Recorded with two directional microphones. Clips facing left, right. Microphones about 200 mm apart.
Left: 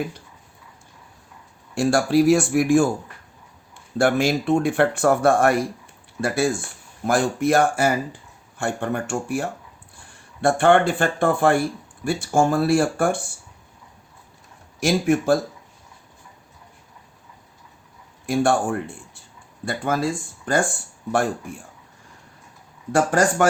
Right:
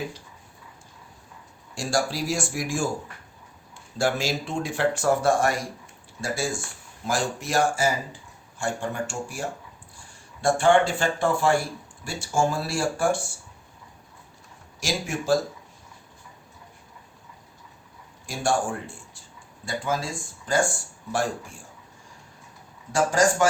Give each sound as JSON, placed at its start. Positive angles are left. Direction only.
{"t": 1.7, "sound": "speech", "side_deg": 60}
{"t": 3.9, "sound": "speech", "side_deg": 60}
{"t": 14.8, "sound": "speech", "side_deg": 55}
{"t": 18.3, "sound": "speech", "side_deg": 60}
{"t": 22.9, "sound": "speech", "side_deg": 60}